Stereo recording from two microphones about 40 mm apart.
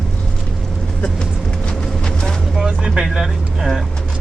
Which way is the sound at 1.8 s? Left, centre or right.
Centre.